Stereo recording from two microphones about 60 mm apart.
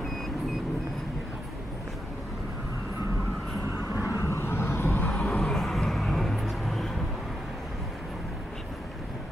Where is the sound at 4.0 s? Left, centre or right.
Left.